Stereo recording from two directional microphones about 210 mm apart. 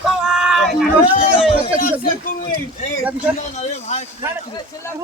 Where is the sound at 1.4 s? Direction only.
30° left (ahead or behind).